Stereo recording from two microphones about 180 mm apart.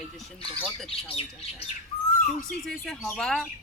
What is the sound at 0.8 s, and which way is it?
Speech, 35° left (ahead or behind).